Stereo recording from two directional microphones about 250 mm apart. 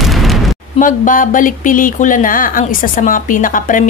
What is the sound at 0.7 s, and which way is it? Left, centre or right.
Speech, left.